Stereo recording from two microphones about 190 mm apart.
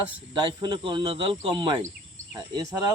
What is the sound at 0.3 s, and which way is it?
Speech, 25° right (ahead or behind).